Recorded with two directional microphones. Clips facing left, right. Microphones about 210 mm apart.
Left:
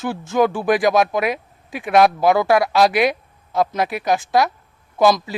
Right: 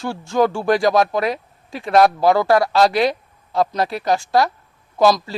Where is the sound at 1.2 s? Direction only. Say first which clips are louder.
Even; 20° left (ahead or behind).